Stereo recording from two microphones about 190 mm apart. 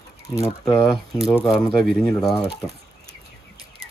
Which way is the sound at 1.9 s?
5° left (ahead or behind).